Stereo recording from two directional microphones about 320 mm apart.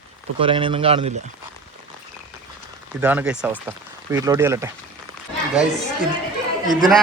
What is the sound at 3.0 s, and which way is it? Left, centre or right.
Speech, centre.